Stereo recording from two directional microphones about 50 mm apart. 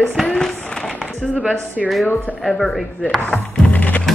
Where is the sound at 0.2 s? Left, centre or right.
Centre.